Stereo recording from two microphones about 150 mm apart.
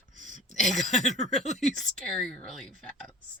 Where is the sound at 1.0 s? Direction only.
50° left (ahead or behind).